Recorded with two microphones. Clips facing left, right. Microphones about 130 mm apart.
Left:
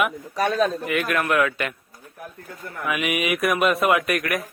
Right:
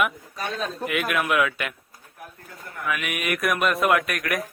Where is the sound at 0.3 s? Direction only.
75° left (ahead or behind).